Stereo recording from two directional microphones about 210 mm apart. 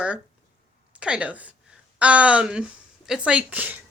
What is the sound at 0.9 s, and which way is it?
A woman's voice, 5° right (ahead or behind).